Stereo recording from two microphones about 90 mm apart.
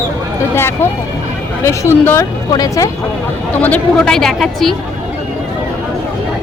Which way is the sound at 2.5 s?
40° left (ahead or behind).